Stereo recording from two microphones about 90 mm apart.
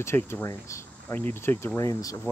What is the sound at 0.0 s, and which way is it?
Speech, 30° left (ahead or behind).